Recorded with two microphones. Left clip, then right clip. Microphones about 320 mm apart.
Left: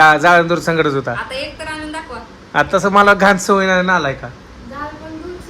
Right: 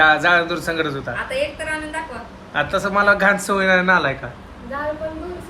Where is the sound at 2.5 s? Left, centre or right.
Centre.